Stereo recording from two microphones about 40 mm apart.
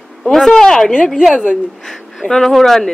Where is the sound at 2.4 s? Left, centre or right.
Centre.